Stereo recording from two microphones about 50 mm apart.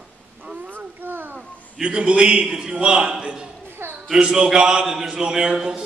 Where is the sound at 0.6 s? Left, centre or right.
Right.